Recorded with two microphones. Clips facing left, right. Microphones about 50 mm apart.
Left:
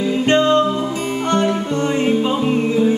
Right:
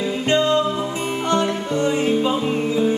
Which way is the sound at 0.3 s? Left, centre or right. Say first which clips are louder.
Left 3 dB; left.